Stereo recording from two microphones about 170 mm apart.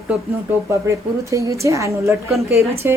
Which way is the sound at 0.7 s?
20° right (ahead or behind).